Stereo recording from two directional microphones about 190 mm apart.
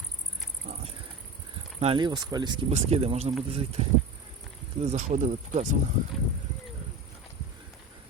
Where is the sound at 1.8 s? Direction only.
25° right (ahead or behind).